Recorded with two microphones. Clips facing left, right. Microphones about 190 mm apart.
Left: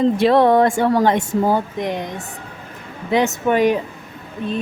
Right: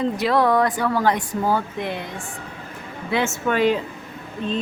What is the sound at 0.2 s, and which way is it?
A woman's voice, 25° left (ahead or behind).